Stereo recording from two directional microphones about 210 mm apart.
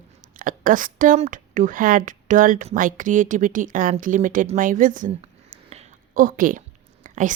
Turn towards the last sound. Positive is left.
turn(degrees=-35)  # may be behind; listen again after turning